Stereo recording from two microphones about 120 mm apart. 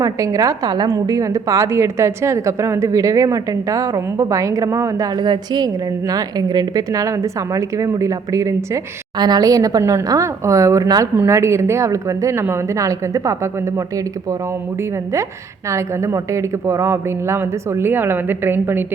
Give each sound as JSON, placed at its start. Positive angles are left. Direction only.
{"t": 0.0, "sound": "a woman's voice", "side_deg": -30}